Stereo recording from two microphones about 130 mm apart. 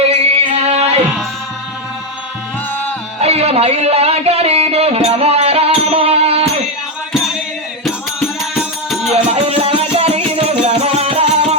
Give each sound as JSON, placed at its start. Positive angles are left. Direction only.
{"t": 0.0, "sound": "music", "side_deg": -50}
{"t": 3.2, "sound": "music", "side_deg": -50}
{"t": 9.3, "sound": "music", "side_deg": -50}